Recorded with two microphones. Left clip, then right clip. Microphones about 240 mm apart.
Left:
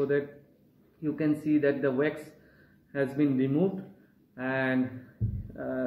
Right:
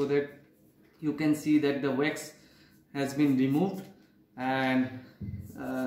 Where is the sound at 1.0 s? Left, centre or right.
Right.